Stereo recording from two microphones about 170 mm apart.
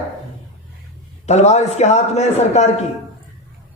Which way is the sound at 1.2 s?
40° left (ahead or behind).